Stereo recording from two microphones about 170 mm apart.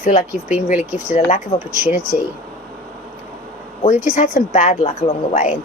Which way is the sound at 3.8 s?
45° left (ahead or behind).